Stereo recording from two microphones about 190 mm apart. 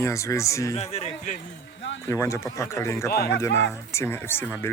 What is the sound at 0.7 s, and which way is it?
Speech, 35° left (ahead or behind).